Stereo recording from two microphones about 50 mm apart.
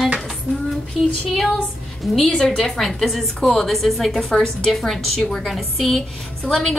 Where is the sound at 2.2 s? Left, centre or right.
Centre.